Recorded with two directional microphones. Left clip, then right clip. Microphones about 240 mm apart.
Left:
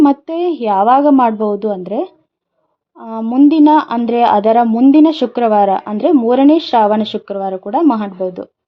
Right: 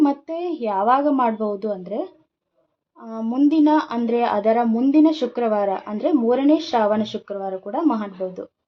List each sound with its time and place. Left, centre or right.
0.0 s a woman's voice: left